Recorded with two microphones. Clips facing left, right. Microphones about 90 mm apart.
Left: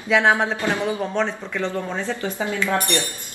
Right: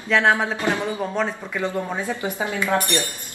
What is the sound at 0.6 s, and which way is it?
Speech, 20° right (ahead or behind).